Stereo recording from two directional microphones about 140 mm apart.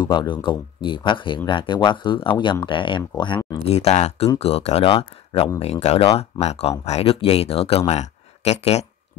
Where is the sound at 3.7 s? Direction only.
50° left (ahead or behind).